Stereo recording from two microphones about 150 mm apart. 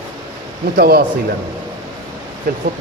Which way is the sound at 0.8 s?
90° right.